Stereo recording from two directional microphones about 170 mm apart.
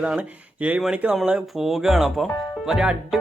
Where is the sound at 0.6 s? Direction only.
5° right (ahead or behind).